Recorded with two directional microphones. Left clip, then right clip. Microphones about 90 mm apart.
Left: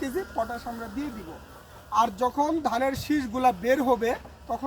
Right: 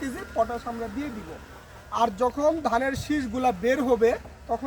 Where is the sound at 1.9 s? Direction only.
20° right (ahead or behind).